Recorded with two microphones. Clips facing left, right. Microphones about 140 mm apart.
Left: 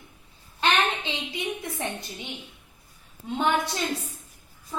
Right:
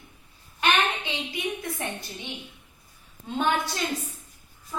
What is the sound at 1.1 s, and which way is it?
Speech, 25° left (ahead or behind).